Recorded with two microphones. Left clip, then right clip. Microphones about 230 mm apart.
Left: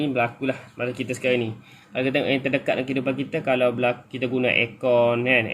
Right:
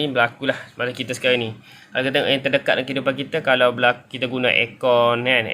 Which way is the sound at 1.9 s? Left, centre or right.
Right.